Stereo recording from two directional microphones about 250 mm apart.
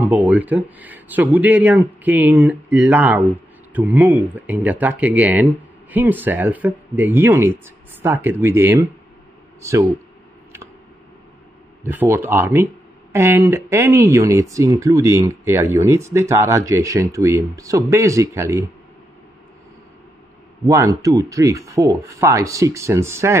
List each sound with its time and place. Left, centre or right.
0.0 s speech: centre
11.8 s speech: centre
20.6 s speech: centre